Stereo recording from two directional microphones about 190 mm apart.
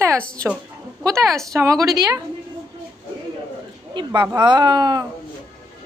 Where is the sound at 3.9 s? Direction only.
25° right (ahead or behind).